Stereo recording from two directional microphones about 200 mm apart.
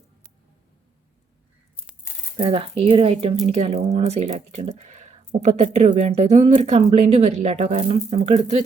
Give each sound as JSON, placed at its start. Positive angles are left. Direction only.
{"t": 2.4, "sound": "speech", "side_deg": -25}